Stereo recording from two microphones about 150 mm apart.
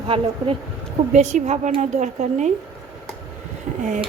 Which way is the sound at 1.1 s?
50° right (ahead or behind).